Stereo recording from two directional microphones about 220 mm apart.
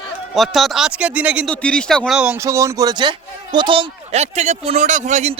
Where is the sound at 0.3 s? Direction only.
Centre (ahead or behind).